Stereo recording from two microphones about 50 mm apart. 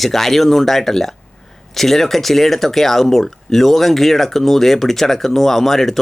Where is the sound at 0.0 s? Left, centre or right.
Centre.